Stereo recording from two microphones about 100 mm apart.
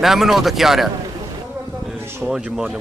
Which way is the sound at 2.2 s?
5° right (ahead or behind).